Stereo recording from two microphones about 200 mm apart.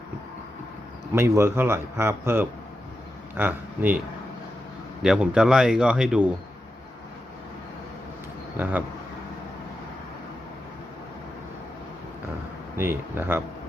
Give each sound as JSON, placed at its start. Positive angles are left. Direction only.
{"t": 1.1, "sound": "a man's voice", "side_deg": -15}
{"t": 5.0, "sound": "speech", "side_deg": -5}
{"t": 8.5, "sound": "a man's voice", "side_deg": -10}
{"t": 12.7, "sound": "a man's voice", "side_deg": -10}